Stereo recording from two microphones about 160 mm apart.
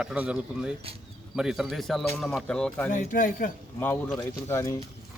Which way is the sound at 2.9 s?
55° left (ahead or behind).